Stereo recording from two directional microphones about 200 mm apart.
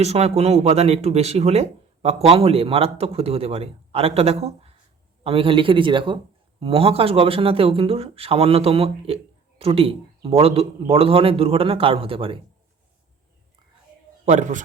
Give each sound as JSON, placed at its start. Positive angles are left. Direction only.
{"t": 0.0, "sound": "a man's voice", "side_deg": -30}
{"t": 14.3, "sound": "speech", "side_deg": -35}